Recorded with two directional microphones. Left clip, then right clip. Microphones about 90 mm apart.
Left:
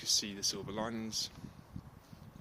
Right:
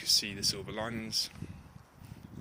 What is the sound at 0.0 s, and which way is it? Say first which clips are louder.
Speech: right 4 dB; 30° left (ahead or behind).